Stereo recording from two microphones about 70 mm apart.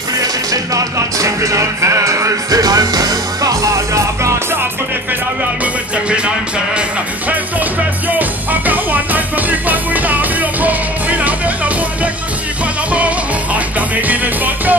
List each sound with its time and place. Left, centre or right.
0.2 s music: right
2.6 s music: right
6.0 s music: centre
8.1 s music: right
13.7 s music: right